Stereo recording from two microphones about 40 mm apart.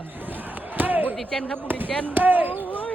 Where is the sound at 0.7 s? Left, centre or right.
Right.